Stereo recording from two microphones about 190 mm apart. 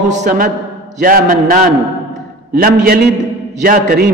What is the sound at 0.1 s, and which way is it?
A man's voice, 45° right (ahead or behind).